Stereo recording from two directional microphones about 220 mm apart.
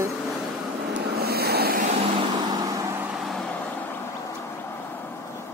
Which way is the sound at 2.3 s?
15° right (ahead or behind).